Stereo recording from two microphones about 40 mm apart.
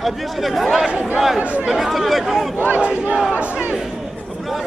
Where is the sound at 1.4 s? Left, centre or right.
Right.